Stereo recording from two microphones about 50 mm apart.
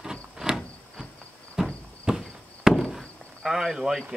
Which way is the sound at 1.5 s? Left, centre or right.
Centre.